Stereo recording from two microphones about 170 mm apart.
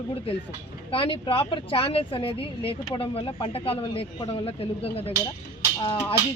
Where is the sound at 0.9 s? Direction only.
30° left (ahead or behind).